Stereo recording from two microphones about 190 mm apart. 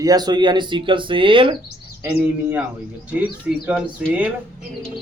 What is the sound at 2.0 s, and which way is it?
A man's voice, 10° right (ahead or behind).